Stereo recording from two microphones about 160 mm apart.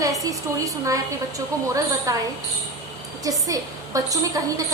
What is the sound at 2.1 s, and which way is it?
Speech, 20° right (ahead or behind).